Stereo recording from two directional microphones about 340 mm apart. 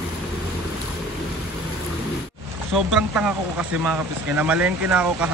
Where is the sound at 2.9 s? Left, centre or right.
Centre.